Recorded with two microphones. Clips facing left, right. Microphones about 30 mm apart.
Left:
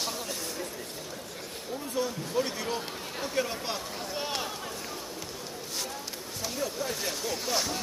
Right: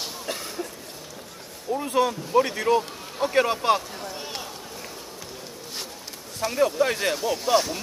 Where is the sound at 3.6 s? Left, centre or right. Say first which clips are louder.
Right 13 dB; right.